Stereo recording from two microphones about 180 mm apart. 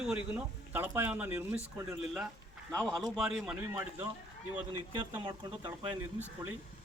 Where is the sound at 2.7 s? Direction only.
Centre (ahead or behind).